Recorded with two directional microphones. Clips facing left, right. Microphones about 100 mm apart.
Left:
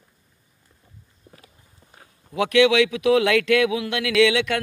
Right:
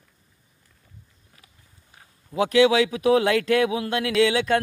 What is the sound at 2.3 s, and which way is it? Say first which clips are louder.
Speech: even; 35° right (ahead or behind).